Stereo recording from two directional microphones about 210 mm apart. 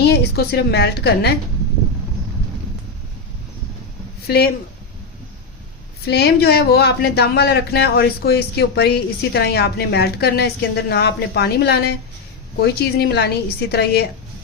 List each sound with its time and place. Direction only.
0.0 s speech: 50° left (ahead or behind)
6.1 s speech: 50° left (ahead or behind)